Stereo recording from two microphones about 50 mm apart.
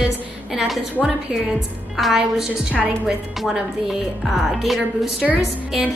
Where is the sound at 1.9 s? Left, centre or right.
Centre.